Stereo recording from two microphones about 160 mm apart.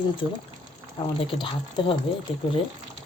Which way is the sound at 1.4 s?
30° left (ahead or behind).